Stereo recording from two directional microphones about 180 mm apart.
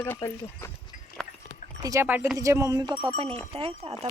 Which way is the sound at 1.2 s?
Centre (ahead or behind).